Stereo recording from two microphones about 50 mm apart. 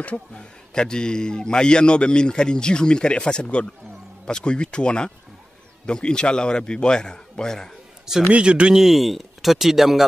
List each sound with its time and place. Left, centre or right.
0.0 s a man's voice: left
8.3 s speech: right
8.7 s speech: centre